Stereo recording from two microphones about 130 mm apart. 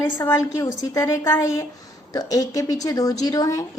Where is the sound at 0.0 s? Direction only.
20° left (ahead or behind).